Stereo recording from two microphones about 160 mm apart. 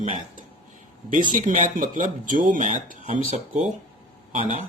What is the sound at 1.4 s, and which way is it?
Speech, 55° right (ahead or behind).